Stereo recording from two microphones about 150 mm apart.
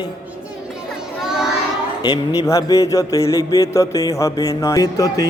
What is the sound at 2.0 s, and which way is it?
Mantra, 25° left (ahead or behind).